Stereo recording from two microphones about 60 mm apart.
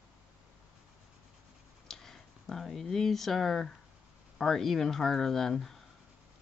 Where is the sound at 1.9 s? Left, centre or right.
Centre.